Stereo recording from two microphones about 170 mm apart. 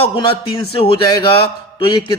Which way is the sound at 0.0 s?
30° left (ahead or behind).